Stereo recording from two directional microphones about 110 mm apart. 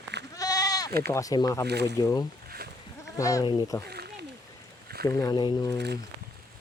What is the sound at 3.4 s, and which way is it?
Speech, 40° left (ahead or behind).